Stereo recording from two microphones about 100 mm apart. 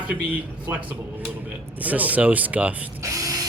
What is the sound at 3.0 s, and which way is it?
Ratchet, 35° right (ahead or behind).